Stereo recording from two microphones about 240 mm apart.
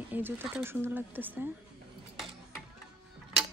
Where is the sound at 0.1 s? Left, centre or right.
Centre.